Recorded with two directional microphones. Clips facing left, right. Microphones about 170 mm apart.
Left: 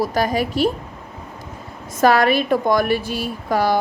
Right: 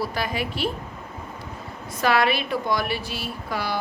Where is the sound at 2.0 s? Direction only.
45° left (ahead or behind).